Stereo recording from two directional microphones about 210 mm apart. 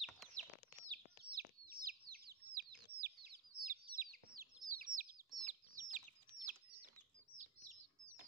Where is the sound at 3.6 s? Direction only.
45° right (ahead or behind).